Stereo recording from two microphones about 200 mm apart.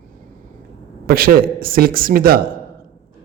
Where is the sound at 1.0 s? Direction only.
45° right (ahead or behind).